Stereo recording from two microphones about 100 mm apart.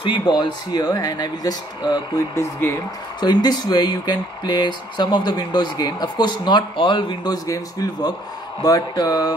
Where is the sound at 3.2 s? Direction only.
45° left (ahead or behind).